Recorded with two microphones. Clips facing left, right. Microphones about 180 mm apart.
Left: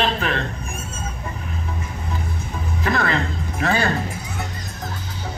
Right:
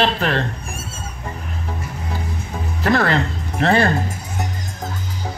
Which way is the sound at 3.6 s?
60° right (ahead or behind).